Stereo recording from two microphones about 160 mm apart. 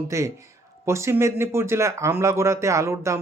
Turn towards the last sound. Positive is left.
turn(degrees=-20)  # may be behind; listen again after turning